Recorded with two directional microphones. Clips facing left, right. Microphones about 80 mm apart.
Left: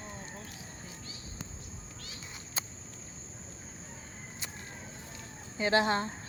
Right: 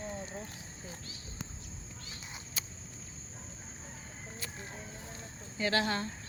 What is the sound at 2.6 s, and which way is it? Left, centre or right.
Cricket, left.